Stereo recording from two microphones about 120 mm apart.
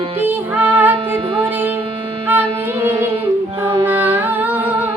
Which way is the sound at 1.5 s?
15° right (ahead or behind).